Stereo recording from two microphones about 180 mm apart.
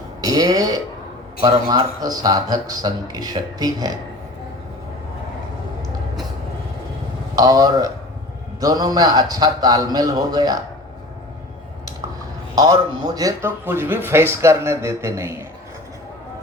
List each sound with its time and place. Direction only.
0.2 s speech: 20° right (ahead or behind)
7.3 s speech: 20° right (ahead or behind)
12.5 s speech: 20° right (ahead or behind)